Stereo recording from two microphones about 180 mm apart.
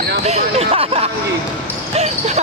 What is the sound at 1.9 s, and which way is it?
Basketball bounce, 35° right (ahead or behind).